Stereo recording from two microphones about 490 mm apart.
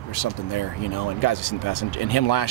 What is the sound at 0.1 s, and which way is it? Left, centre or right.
Speech, left.